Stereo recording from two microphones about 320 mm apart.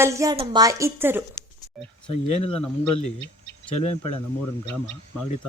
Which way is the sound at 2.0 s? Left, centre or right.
Centre.